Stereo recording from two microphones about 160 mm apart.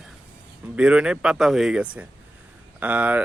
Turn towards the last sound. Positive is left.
turn(degrees=-10)  # may be behind; listen again after turning